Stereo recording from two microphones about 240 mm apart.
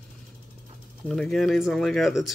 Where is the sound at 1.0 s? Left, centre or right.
Centre.